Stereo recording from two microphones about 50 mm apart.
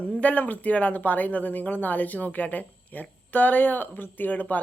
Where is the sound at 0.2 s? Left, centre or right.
Left.